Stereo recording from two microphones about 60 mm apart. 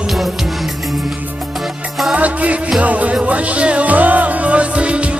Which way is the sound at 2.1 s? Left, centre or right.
Right.